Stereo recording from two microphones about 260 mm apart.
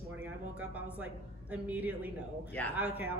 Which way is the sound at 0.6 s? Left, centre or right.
Centre.